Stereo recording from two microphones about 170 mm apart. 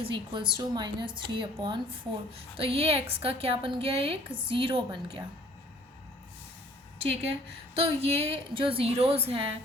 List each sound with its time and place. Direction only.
0.0 s a woman's voice: 30° right (ahead or behind)
7.7 s a woman's voice: 35° right (ahead or behind)